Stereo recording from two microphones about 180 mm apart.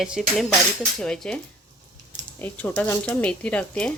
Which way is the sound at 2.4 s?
10° left (ahead or behind).